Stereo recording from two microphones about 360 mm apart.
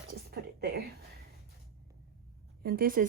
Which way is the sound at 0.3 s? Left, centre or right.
Right.